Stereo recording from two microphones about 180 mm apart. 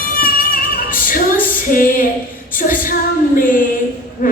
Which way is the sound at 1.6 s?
50° left (ahead or behind).